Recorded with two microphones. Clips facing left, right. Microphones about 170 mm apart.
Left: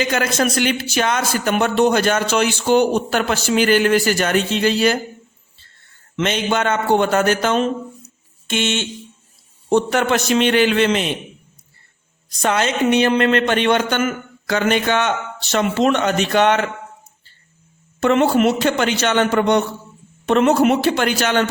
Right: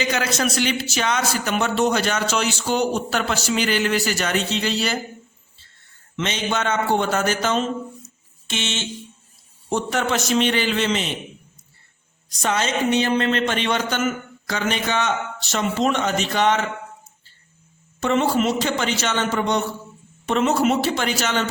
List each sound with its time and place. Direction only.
0.0 s speech: 50° left (ahead or behind)
6.1 s a man's voice: 55° left (ahead or behind)
12.4 s a man's voice: 60° left (ahead or behind)
18.0 s a man's voice: 60° left (ahead or behind)